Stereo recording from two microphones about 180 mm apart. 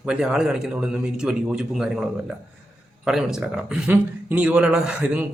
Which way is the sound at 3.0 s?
5° right (ahead or behind).